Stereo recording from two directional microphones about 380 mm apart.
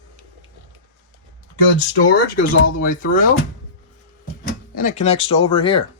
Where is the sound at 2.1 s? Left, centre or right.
Left.